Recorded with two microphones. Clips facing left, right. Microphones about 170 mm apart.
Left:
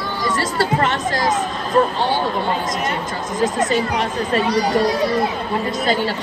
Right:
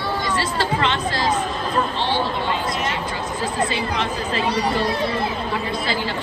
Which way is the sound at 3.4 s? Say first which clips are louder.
Left 6 dB; 45° left (ahead or behind).